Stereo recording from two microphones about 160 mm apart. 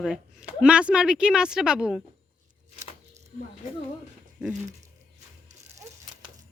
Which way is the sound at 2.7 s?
45° right (ahead or behind).